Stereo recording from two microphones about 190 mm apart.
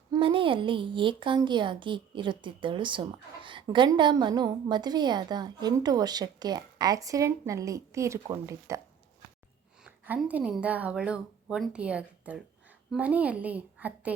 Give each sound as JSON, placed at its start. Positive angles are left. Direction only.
{"t": 0.1, "sound": "a woman's voice", "side_deg": -25}
{"t": 9.8, "sound": "a woman's voice", "side_deg": -5}